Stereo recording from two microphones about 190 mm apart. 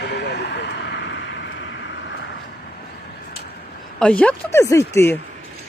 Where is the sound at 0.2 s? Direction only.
65° left (ahead or behind).